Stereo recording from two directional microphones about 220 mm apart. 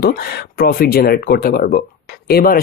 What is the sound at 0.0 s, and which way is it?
Speech, 40° left (ahead or behind).